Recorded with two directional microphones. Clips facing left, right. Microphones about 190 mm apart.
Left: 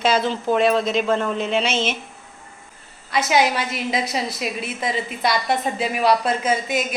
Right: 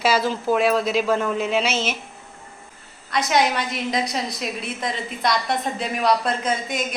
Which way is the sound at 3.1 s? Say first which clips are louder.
Left 1 dB; 5° left (ahead or behind).